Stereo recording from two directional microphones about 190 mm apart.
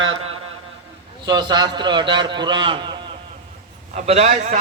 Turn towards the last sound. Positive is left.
turn(degrees=-40)  # may be behind; listen again after turning